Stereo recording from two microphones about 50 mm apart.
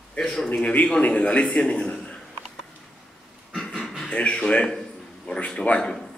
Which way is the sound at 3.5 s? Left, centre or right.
Centre.